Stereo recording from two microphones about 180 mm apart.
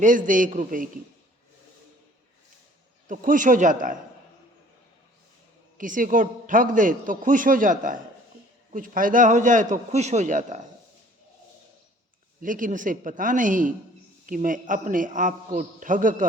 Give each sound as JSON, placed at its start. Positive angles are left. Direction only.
{"t": 0.0, "sound": "a man's voice", "side_deg": -45}
{"t": 3.1, "sound": "a man's voice", "side_deg": -45}
{"t": 5.7, "sound": "a man's voice", "side_deg": -50}
{"t": 12.4, "sound": "a man's voice", "side_deg": -50}